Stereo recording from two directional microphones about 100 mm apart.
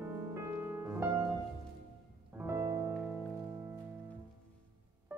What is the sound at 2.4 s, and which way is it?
Music, 30° right (ahead or behind).